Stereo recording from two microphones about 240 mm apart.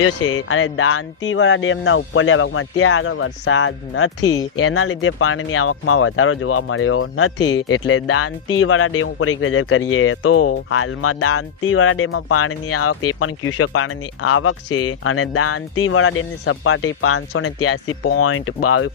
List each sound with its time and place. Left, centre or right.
0.0 s speech: left